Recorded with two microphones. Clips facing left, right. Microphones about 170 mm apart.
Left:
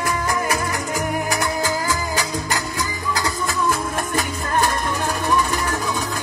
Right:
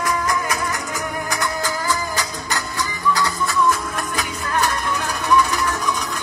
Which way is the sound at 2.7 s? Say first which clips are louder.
Right 3 dB; 40° left (ahead or behind).